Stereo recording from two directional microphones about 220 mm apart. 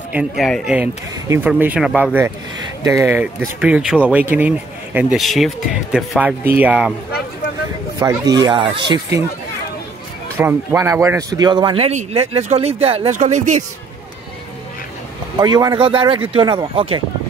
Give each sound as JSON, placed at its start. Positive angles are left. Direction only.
{"t": 0.1, "sound": "speech", "side_deg": 0}
{"t": 8.0, "sound": "speech", "side_deg": -15}
{"t": 10.3, "sound": "a man's voice", "side_deg": -10}
{"t": 15.3, "sound": "a man's voice", "side_deg": -20}